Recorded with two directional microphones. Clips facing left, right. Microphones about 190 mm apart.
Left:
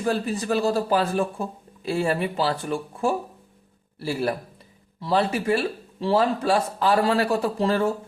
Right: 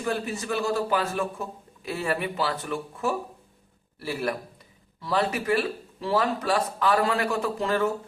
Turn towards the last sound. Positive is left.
turn(degrees=30)  # may be behind; listen again after turning